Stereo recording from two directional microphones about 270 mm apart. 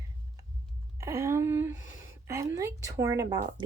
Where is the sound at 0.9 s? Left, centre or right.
Centre.